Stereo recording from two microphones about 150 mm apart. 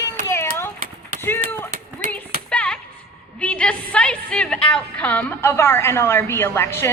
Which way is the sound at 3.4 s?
10° left (ahead or behind).